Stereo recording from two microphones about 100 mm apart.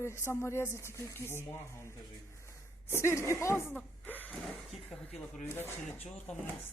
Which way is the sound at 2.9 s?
30° left (ahead or behind).